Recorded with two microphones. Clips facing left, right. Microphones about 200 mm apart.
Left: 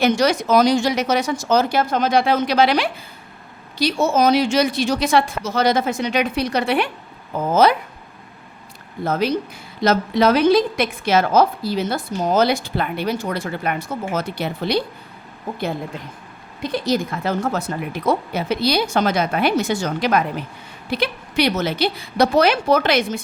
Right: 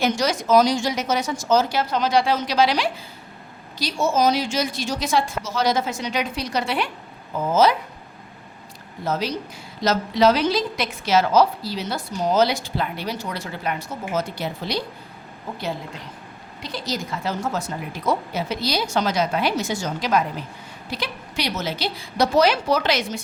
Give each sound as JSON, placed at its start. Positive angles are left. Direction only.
{"t": 0.0, "sound": "a woman's voice", "side_deg": 60}
{"t": 9.0, "sound": "a woman's voice", "side_deg": 55}
{"t": 16.6, "sound": "a woman's voice", "side_deg": 55}